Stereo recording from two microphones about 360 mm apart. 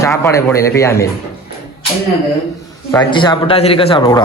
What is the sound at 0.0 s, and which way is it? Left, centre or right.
A man's voice, centre.